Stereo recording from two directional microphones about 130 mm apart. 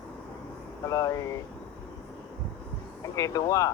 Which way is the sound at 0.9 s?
25° left (ahead or behind).